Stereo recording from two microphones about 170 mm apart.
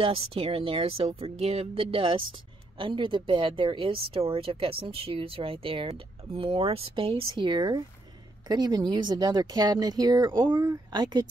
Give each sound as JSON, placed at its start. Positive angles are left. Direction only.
{"t": 0.0, "sound": "speech", "side_deg": -35}